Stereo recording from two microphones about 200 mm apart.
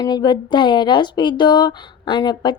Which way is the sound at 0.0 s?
20° left (ahead or behind).